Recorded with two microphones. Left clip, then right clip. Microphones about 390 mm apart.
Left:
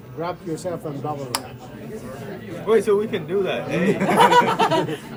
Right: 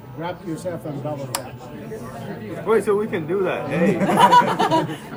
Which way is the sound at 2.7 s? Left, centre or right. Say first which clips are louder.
Left 1 dB; centre.